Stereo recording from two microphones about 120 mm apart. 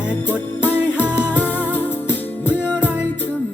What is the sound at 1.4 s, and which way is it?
Music, 15° left (ahead or behind).